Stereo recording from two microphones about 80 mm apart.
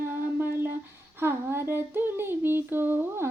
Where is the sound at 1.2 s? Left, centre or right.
Right.